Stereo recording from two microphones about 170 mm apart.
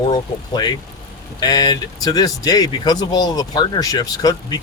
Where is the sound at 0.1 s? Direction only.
25° left (ahead or behind).